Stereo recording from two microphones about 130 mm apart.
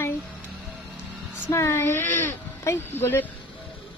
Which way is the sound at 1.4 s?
20° left (ahead or behind).